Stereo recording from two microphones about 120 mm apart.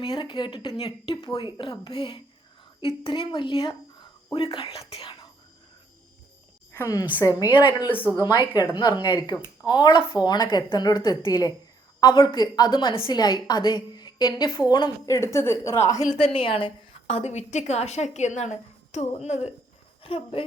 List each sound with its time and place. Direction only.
0.0 s a woman's voice: 35° left (ahead or behind)
4.6 s speech: 55° left (ahead or behind)
6.7 s a woman's voice: 25° left (ahead or behind)
16.1 s a woman's voice: 50° left (ahead or behind); by 19.5 s 65° left (ahead or behind)
20.0 s speech: 50° left (ahead or behind)